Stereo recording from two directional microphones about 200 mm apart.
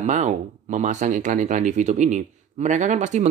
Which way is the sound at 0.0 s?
35° right (ahead or behind).